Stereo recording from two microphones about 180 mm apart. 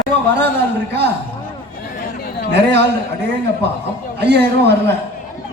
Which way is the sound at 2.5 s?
70° right (ahead or behind).